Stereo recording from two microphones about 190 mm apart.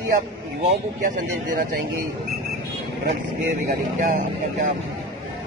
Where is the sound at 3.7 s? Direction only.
40° right (ahead or behind).